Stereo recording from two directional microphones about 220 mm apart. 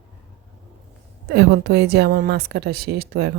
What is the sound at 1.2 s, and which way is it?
A woman's voice, 50° right (ahead or behind).